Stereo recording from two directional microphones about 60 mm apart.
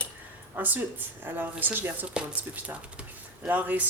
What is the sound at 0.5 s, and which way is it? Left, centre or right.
Speech, right.